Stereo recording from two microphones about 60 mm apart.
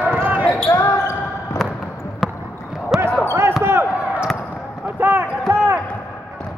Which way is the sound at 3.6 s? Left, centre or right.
Right.